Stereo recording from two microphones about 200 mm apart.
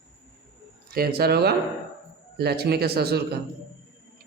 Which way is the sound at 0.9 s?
50° right (ahead or behind).